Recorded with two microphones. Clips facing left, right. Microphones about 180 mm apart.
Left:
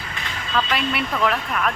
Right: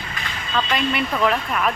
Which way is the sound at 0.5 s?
5° left (ahead or behind).